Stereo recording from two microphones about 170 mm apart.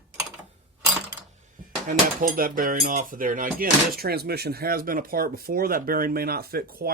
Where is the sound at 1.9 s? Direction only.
55° right (ahead or behind).